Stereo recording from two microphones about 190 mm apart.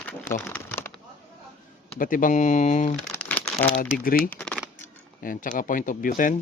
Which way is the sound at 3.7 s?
45° left (ahead or behind).